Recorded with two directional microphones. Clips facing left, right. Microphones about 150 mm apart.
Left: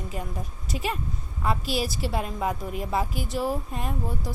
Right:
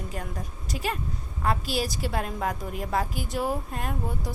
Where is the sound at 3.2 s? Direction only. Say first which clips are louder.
Left 1 dB; 45° right (ahead or behind).